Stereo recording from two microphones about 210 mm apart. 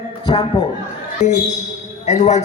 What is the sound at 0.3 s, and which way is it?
Speech, 20° left (ahead or behind).